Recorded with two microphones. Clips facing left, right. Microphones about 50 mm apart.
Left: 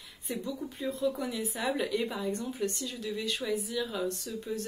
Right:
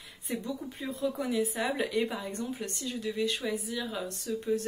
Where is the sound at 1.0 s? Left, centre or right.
Centre.